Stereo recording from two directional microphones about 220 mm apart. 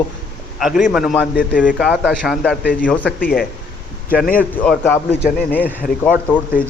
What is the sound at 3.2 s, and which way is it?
A man's voice, 45° left (ahead or behind).